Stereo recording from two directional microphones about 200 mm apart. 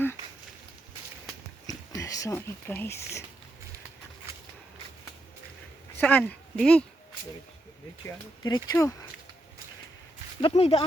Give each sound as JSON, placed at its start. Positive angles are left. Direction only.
{"t": 1.6, "sound": "speech", "side_deg": 15}
{"t": 6.0, "sound": "a woman's voice", "side_deg": 5}
{"t": 8.0, "sound": "speech", "side_deg": 20}
{"t": 10.4, "sound": "speech", "side_deg": 30}